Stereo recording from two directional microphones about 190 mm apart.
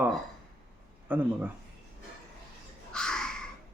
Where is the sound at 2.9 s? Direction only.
5° left (ahead or behind).